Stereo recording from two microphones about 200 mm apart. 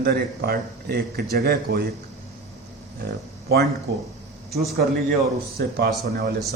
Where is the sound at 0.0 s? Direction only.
50° right (ahead or behind).